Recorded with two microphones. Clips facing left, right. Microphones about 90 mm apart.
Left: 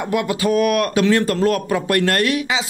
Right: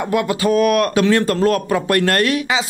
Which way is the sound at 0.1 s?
40° right (ahead or behind).